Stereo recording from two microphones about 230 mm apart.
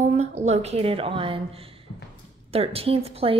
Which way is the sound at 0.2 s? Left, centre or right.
Right.